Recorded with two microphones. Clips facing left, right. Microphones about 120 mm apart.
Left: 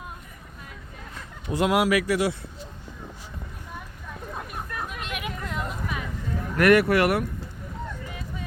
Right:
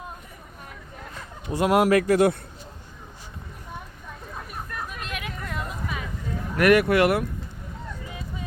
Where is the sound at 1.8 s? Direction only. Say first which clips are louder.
Right 4 dB; 45° right (ahead or behind).